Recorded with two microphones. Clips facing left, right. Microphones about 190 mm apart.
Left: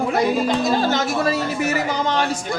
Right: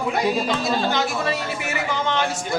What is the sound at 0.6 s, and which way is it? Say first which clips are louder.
Speech: left 3 dB; 40° left (ahead or behind).